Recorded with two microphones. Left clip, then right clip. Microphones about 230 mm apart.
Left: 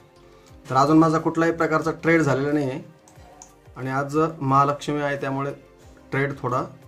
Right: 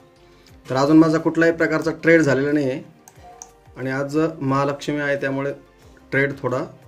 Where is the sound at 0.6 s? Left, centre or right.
Centre.